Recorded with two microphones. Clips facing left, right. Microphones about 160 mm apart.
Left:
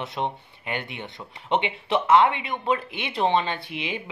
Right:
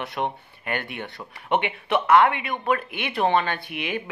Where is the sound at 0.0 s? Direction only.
20° left (ahead or behind).